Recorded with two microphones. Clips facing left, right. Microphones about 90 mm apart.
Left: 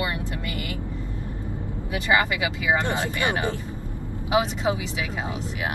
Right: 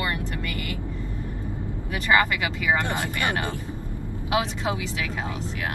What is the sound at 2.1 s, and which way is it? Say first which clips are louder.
Speech: right 1 dB; 20° left (ahead or behind).